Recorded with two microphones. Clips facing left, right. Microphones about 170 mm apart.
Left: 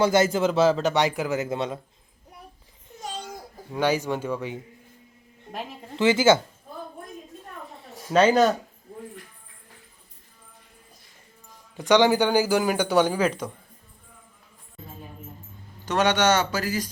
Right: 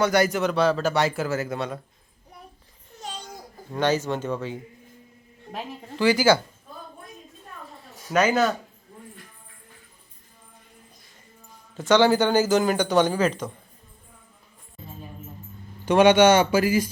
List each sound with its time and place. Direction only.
0.0 s speech: 25° left (ahead or behind)
3.7 s a man's voice: 10° left (ahead or behind)
6.0 s speech: 20° left (ahead or behind)
7.7 s a sound: 25° left (ahead or behind)
11.8 s a man's voice: 15° left (ahead or behind)
15.9 s speech: 10° right (ahead or behind)